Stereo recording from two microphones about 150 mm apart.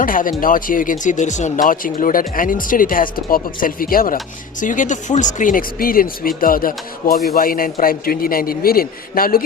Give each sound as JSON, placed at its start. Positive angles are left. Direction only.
{"t": 0.0, "sound": "speech", "side_deg": 65}